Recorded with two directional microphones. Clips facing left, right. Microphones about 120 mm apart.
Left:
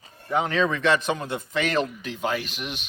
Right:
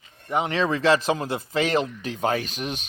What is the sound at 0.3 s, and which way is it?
Speech, 15° right (ahead or behind).